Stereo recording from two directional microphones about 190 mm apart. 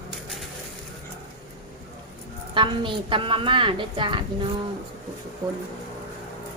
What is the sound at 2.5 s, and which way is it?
A woman's voice, 25° right (ahead or behind).